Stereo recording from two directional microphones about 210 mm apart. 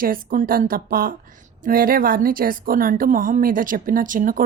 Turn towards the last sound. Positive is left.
turn(degrees=-40)  # may be behind; listen again after turning